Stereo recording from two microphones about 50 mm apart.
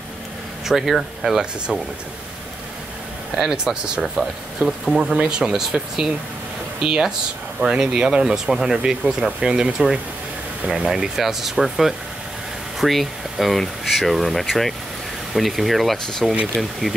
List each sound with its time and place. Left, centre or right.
0.7 s speech: centre
3.3 s speech: centre
4.0 s speech: centre
5.1 s speech: centre
5.5 s speech: centre